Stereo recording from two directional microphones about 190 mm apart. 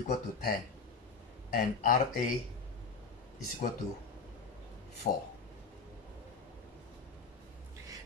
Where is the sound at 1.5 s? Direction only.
50° left (ahead or behind).